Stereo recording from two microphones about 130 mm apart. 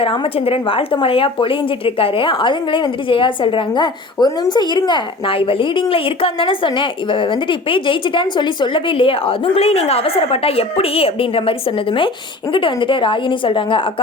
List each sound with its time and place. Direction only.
0.0 s a woman's voice: 45° left (ahead or behind)